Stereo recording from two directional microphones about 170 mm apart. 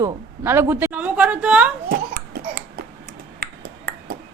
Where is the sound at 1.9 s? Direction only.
70° right (ahead or behind).